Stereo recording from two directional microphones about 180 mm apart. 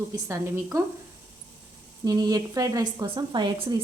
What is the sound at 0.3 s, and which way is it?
Speech, 15° right (ahead or behind).